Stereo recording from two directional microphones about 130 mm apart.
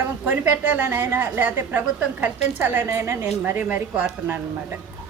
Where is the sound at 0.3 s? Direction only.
15° right (ahead or behind).